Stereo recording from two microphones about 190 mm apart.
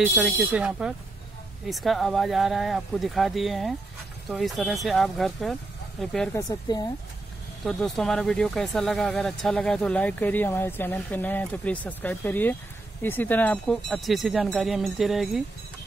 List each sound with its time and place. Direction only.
0.0 s speech: 5° right (ahead or behind)
6.3 s speech: 20° left (ahead or behind)
7.6 s speech: centre (ahead or behind)